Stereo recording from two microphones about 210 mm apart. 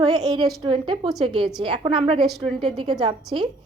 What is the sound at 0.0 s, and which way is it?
A woman's voice, 20° right (ahead or behind).